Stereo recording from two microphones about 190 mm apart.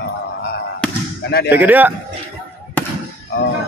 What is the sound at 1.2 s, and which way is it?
Speech, 60° left (ahead or behind).